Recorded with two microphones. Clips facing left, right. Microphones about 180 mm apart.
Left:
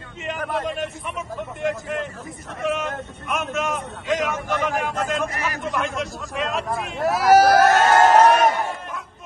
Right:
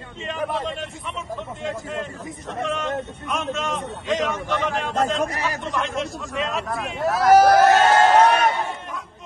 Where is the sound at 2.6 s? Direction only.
5° left (ahead or behind).